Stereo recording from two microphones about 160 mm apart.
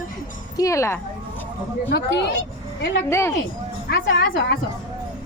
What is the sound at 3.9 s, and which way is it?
Speech, 90° left.